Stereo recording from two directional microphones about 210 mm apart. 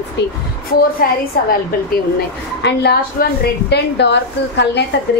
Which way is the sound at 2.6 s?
50° left (ahead or behind).